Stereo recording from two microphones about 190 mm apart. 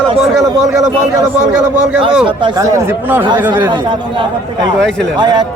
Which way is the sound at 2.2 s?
20° right (ahead or behind).